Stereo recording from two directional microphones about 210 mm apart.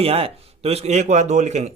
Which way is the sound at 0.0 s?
30° right (ahead or behind).